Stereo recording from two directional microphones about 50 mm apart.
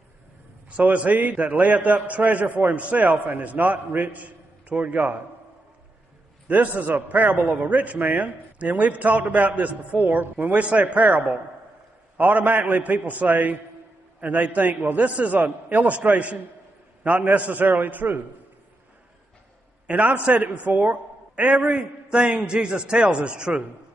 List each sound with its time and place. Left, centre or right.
0.9 s a man's voice: right
6.4 s a man's voice: right
19.9 s a man's voice: right